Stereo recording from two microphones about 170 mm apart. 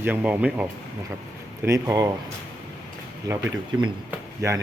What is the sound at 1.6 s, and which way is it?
Speech, 20° right (ahead or behind).